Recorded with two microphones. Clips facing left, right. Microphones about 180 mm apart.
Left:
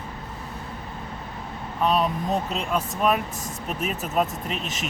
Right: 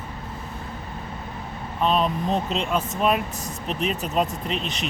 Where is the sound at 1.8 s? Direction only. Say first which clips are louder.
Right 1 dB; 5° left (ahead or behind).